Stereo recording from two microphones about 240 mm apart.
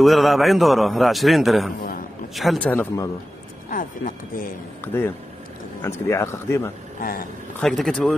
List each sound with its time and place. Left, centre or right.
0.0 s a man's voice: centre
1.8 s a sound: left
2.3 s a man's voice: centre
3.7 s speech: left
4.8 s speech: centre
7.0 s speech: left
7.6 s a man's voice: centre